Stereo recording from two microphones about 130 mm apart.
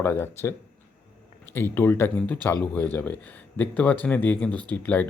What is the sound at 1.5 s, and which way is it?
Speech, 15° left (ahead or behind).